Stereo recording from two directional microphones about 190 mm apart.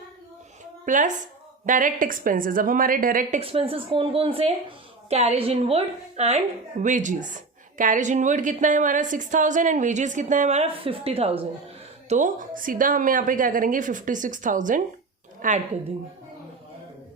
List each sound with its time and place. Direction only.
0.9 s a woman's voice: 40° right (ahead or behind)
3.4 s a woman's voice: 30° right (ahead or behind)